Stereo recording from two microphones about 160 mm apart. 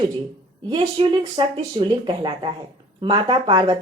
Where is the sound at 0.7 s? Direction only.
30° right (ahead or behind).